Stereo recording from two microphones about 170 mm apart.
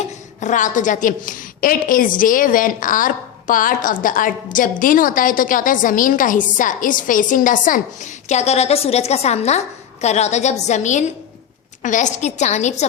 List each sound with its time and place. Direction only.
0.3 s a woman's voice: 50° left (ahead or behind)